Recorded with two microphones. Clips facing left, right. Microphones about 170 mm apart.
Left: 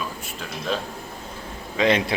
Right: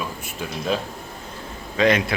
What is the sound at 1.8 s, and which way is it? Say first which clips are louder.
Speech: right 2 dB; 20° left (ahead or behind).